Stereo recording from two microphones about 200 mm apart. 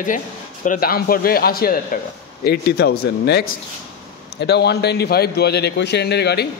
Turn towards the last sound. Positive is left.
turn(degrees=55)  # may be behind; listen again after turning